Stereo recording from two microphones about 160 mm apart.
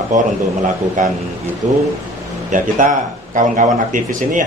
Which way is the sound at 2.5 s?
55° right (ahead or behind).